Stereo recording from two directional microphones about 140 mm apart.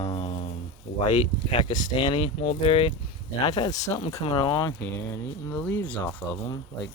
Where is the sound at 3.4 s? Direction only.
30° left (ahead or behind).